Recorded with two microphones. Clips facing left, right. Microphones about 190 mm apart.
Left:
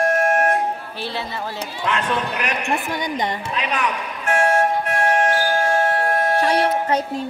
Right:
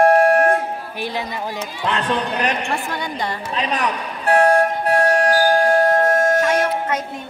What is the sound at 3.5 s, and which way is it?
Music, 35° right (ahead or behind).